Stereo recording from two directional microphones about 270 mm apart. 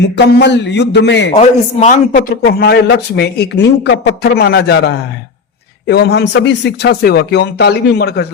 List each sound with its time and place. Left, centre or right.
0.0 s a man's voice: left
1.4 s a man's voice: left
5.9 s a man's voice: left